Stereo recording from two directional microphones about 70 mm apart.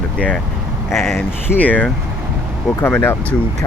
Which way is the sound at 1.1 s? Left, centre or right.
Left.